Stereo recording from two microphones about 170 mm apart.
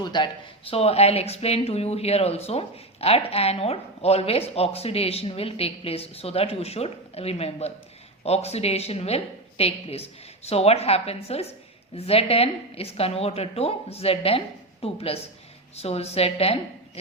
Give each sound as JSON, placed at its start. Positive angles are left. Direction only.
{"t": 0.0, "sound": "a woman's voice", "side_deg": 25}